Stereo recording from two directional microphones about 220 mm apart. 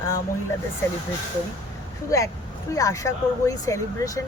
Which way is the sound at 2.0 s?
15° left (ahead or behind).